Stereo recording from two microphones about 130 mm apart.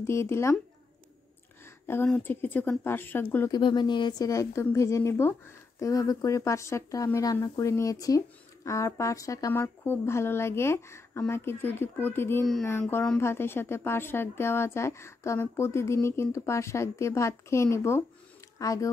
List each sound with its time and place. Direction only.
0.0 s a woman's voice: 20° left (ahead or behind)
2.0 s a woman's voice: 10° left (ahead or behind)
3.5 s speech: 35° left (ahead or behind)
4.3 s a woman's voice: 25° left (ahead or behind)